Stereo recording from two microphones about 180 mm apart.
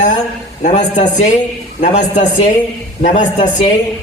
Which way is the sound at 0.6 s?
45° left (ahead or behind).